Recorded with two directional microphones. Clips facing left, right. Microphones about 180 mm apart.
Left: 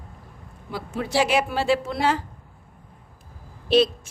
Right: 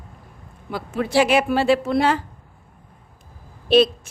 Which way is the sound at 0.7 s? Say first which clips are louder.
Right 5 dB; 60° right (ahead or behind).